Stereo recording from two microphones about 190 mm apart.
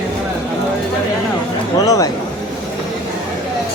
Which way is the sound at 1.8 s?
20° left (ahead or behind).